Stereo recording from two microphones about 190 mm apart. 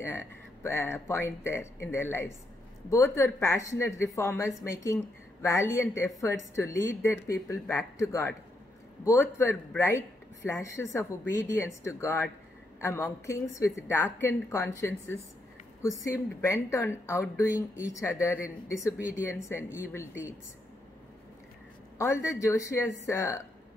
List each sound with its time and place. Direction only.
0.0 s speech: 15° left (ahead or behind)
21.9 s speech: 15° left (ahead or behind)